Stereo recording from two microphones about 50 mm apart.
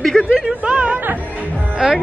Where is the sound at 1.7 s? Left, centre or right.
Centre.